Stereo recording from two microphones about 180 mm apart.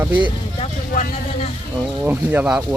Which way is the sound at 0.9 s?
45° left (ahead or behind).